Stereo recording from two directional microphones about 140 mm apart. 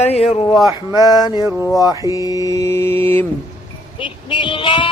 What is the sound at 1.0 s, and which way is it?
Mantra, 30° left (ahead or behind).